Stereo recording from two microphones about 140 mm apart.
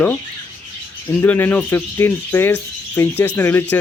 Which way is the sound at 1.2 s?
15° left (ahead or behind).